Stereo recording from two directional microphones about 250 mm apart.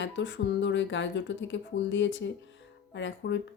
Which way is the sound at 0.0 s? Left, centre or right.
Left.